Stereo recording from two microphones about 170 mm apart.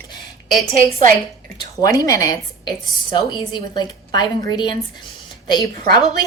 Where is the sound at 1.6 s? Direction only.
20° left (ahead or behind).